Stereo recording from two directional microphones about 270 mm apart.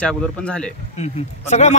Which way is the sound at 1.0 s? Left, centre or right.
Left.